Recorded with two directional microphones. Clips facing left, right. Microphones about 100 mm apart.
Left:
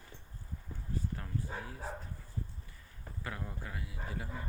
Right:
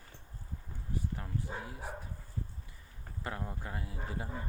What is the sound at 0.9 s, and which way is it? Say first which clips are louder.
Speech: right 1 dB; 15° right (ahead or behind).